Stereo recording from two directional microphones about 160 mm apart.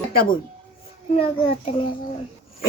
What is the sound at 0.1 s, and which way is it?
Speech, 65° left (ahead or behind).